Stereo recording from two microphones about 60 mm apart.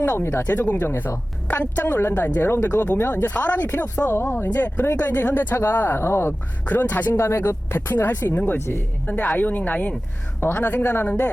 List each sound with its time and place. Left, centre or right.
0.0 s speech: left
0.4 s speech: left
3.1 s speech: left
4.2 s speech: left
4.6 s speech: left
6.7 s speech: left
7.1 s speech: left
8.5 s speech: left
9.1 s speech: left